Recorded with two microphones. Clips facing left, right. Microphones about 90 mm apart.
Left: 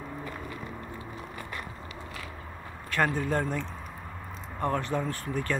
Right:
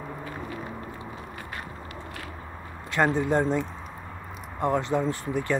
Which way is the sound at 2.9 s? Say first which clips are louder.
Right 4 dB; 20° right (ahead or behind).